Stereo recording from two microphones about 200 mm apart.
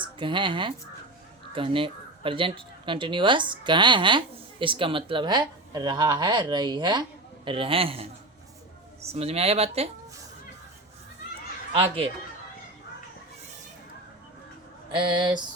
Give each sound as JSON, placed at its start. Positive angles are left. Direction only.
{"t": 0.0, "sound": "speech", "side_deg": -25}
{"t": 11.7, "sound": "speech", "side_deg": -30}
{"t": 14.9, "sound": "speech", "side_deg": -25}